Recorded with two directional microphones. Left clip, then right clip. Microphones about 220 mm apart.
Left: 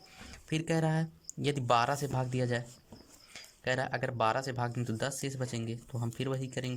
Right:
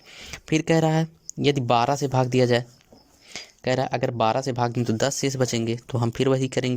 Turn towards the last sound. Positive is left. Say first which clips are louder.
# right 14 dB
turn(degrees=-25)  # may be behind; listen again after turning